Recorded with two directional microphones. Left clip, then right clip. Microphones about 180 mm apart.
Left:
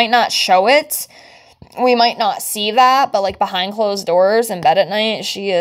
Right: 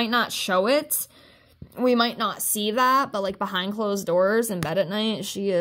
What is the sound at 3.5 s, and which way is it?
Speech, 40° right (ahead or behind).